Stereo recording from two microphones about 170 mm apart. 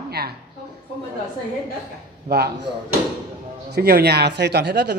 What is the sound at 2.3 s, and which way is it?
Speech, 75° right (ahead or behind).